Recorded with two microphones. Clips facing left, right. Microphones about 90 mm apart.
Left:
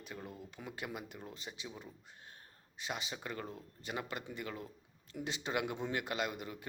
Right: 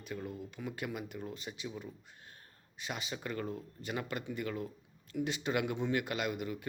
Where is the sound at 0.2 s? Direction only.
30° left (ahead or behind).